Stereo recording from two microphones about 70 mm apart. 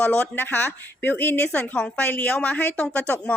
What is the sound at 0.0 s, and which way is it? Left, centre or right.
A woman's voice, left.